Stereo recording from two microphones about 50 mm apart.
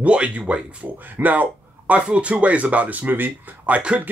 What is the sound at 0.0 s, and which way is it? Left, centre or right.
A man's voice, right.